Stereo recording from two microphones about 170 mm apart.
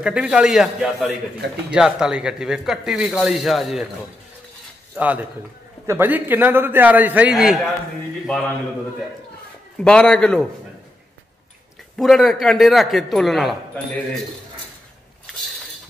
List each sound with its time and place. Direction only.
0.0 s speech: 5° right (ahead or behind)
4.9 s a man's voice: 10° right (ahead or behind)
9.8 s speech: 5° left (ahead or behind)
12.0 s speech: centre (ahead or behind)